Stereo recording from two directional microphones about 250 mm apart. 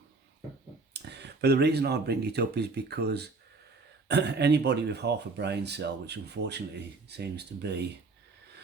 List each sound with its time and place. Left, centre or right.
0.9 s speech: right